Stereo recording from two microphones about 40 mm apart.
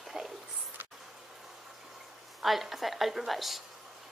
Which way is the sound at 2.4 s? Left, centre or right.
Centre.